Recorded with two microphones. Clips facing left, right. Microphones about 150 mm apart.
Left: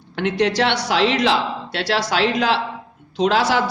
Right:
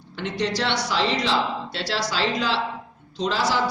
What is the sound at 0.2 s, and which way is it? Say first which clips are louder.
A man's voice: left 7 dB; 65° left (ahead or behind).